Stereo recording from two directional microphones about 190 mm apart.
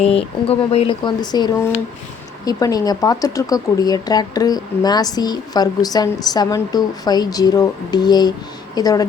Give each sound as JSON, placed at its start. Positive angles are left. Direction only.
{"t": 0.0, "sound": "speech", "side_deg": 30}